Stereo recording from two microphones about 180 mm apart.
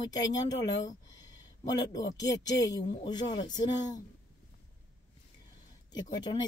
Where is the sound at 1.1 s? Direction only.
20° left (ahead or behind).